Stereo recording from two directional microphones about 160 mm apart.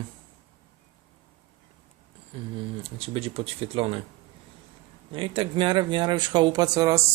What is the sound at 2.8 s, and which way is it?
Speech, 35° right (ahead or behind).